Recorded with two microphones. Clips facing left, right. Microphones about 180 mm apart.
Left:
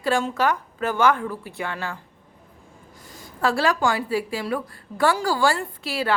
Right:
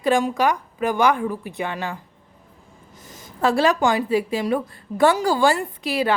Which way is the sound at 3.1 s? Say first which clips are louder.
Right 3 dB; 20° right (ahead or behind).